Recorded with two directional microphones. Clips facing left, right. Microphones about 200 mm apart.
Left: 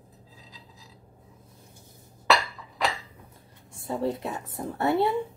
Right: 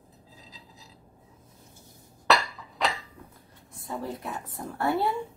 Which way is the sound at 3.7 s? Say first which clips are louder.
Left 6 dB; 25° left (ahead or behind).